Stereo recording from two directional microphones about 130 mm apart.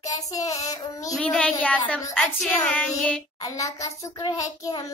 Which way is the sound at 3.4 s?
25° left (ahead or behind).